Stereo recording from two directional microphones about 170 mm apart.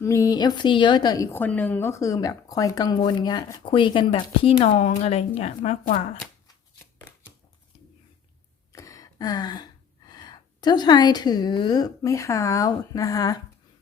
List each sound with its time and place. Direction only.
0.0 s a woman's voice: 20° left (ahead or behind); by 5.7 s 35° left (ahead or behind)
8.7 s a sound: 20° left (ahead or behind)
10.1 s a woman's voice: 25° left (ahead or behind)